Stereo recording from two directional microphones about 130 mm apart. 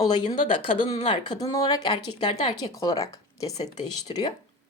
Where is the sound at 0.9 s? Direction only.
40° left (ahead or behind); by 3.7 s 25° left (ahead or behind).